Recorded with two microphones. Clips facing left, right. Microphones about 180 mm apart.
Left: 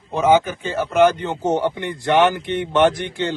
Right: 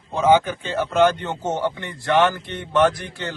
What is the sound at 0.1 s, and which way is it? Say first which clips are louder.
A man's voice: left 1 dB; 10° left (ahead or behind).